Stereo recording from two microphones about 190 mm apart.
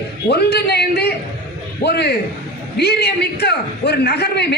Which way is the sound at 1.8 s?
60° left (ahead or behind).